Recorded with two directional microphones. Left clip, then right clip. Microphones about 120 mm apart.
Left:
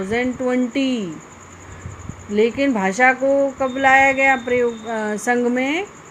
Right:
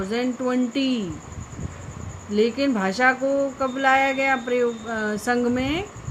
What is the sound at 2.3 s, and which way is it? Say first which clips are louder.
Speech: left 4 dB; 15° left (ahead or behind).